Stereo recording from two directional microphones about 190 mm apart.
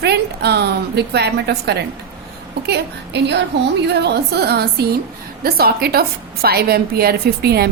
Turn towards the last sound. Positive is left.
turn(degrees=-55)  # may be behind; listen again after turning